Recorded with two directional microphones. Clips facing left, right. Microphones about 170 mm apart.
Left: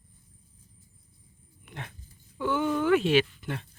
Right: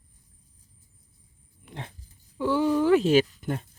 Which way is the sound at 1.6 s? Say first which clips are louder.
Right 2 dB; 30° right (ahead or behind).